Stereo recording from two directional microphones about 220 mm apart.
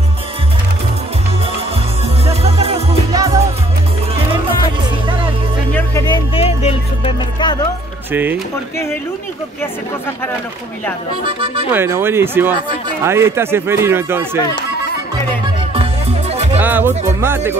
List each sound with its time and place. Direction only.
2.2 s music: 30° right (ahead or behind)
5.7 s music: 10° left (ahead or behind)
6.0 s music: 20° left (ahead or behind)
8.1 s a man's voice: 10° right (ahead or behind)
11.7 s a man's voice: 10° right (ahead or behind)
16.5 s a man's voice: 10° right (ahead or behind)